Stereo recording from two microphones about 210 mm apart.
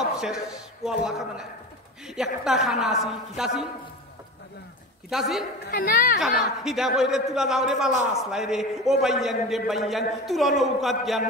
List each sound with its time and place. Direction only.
0.0 s a sound: centre (ahead or behind)
0.8 s a man's voice: centre (ahead or behind)
5.7 s a woman's voice: 45° left (ahead or behind)
6.1 s a man's voice: centre (ahead or behind)